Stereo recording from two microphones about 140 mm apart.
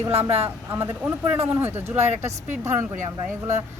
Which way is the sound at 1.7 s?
50° right (ahead or behind).